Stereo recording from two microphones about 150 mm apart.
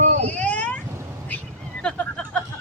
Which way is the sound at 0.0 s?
50° right (ahead or behind).